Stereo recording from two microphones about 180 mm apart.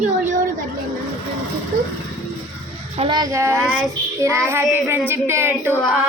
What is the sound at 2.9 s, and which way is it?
A woman's voice, 25° right (ahead or behind).